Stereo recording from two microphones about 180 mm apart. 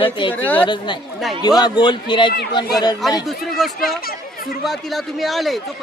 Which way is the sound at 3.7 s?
55° left (ahead or behind).